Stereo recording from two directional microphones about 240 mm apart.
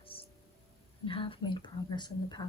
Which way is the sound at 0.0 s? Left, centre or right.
Left.